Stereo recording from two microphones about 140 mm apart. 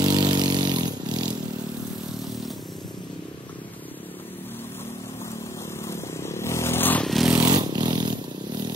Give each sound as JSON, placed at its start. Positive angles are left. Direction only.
{"t": 0.0, "sound": "vehicle", "side_deg": -30}
{"t": 5.9, "sound": "a sound", "side_deg": 20}
{"t": 7.1, "sound": "vehicle", "side_deg": 0}
{"t": 7.3, "sound": "vehicle", "side_deg": -25}